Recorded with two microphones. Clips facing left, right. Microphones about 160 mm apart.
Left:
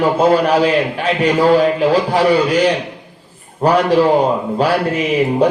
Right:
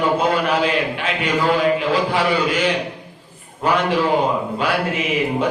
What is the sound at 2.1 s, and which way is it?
A man's voice, 40° left (ahead or behind).